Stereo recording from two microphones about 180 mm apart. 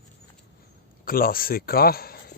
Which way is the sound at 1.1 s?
55° left (ahead or behind).